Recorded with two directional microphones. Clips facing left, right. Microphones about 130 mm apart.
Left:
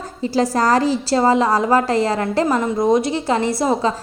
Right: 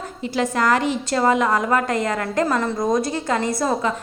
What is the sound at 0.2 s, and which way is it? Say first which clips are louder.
A woman's voice: left 4 dB; 35° left (ahead or behind).